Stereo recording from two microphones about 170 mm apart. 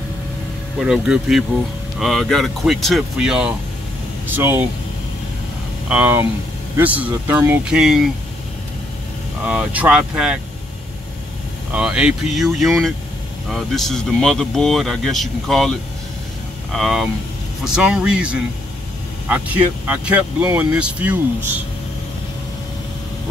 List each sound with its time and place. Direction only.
0.7 s speech: 5° right (ahead or behind)
5.9 s speech: 10° right (ahead or behind)
9.5 s speech: 10° right (ahead or behind)
11.7 s speech: 5° right (ahead or behind)